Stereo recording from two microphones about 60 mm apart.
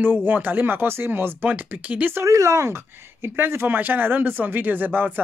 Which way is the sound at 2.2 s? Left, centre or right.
Right.